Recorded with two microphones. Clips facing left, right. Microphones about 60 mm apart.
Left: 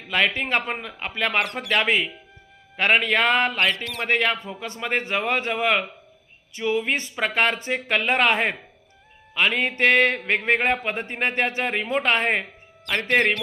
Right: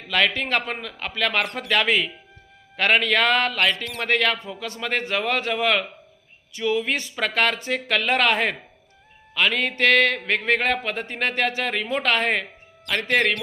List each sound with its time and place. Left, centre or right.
0.1 s a man's voice: centre